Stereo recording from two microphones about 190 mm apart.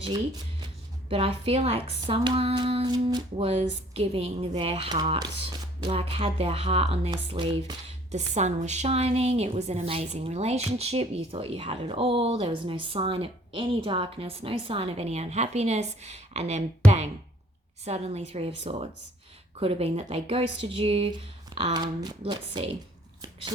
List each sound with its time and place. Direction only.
1.1 s speech: 30° right (ahead or behind)
8.1 s speech: 35° right (ahead or behind)